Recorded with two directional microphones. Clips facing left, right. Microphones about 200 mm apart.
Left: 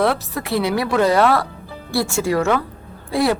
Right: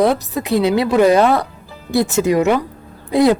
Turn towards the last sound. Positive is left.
turn(degrees=-20)  # may be behind; listen again after turning